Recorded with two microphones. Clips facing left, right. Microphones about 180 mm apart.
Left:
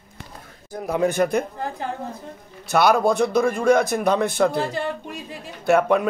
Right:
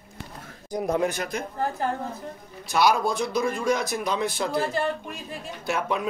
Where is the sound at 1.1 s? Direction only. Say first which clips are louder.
Left 10 dB; 55° left (ahead or behind).